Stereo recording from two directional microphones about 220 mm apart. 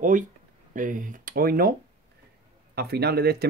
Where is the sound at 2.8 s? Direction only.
45° right (ahead or behind).